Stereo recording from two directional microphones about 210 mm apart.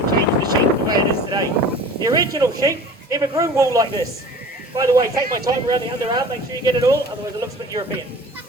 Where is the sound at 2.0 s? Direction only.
15° right (ahead or behind).